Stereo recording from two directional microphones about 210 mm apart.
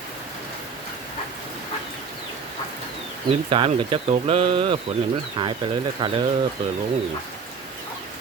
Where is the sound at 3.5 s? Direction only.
25° right (ahead or behind).